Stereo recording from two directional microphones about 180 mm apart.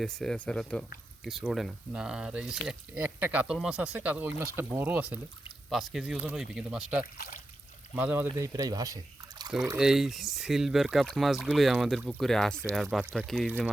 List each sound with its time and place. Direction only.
0.0 s speech: 5° left (ahead or behind); by 9.0 s 20° right (ahead or behind)
9.7 s speech: 5° right (ahead or behind)